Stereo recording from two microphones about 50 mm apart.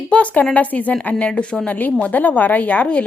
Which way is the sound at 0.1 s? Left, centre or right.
Left.